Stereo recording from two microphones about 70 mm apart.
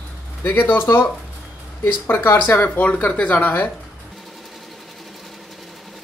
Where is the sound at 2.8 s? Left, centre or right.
Left.